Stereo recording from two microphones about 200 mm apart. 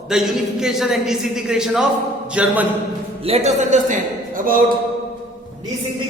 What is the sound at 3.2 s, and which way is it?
A man's voice, 30° right (ahead or behind).